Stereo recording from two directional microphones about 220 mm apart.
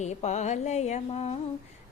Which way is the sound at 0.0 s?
30° left (ahead or behind).